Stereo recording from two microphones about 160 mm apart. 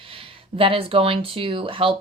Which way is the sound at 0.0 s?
35° right (ahead or behind).